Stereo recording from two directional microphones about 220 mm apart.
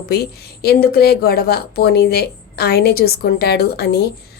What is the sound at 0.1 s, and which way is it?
A woman's voice, 45° left (ahead or behind).